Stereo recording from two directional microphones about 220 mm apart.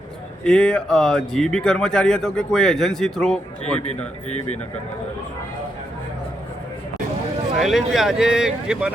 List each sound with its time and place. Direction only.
0.4 s speech: 5° left (ahead or behind)
7.6 s speech: centre (ahead or behind)